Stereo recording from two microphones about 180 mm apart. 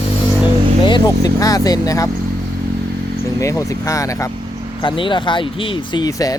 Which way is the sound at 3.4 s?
15° left (ahead or behind).